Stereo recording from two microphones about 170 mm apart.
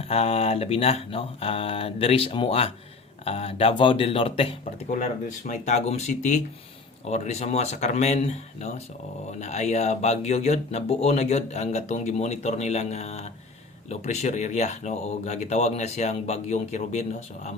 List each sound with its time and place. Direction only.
0.1 s speech: 35° left (ahead or behind)